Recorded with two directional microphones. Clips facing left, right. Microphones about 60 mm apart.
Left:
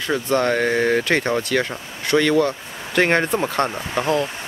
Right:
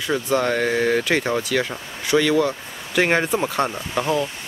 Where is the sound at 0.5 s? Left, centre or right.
Centre.